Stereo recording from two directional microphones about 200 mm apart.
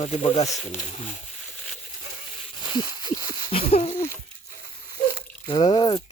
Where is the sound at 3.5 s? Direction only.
30° left (ahead or behind).